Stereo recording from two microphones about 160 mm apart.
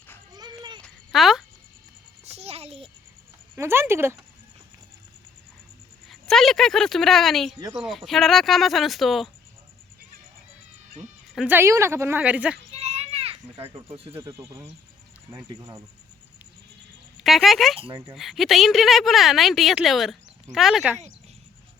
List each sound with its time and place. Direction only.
0.3 s a sound: 25° right (ahead or behind)
0.8 s a sound: centre (ahead or behind)
2.2 s a sound: 40° right (ahead or behind)
3.5 s a woman's voice: 15° right (ahead or behind)
6.1 s speech: centre (ahead or behind)
11.3 s a woman's voice: 10° right (ahead or behind)
12.7 s children playing: 40° right (ahead or behind)
14.1 s a woman's voice: 15° right (ahead or behind)
17.2 s speech: centre (ahead or behind)
17.7 s speech: 35° right (ahead or behind)
18.1 s speech: centre (ahead or behind)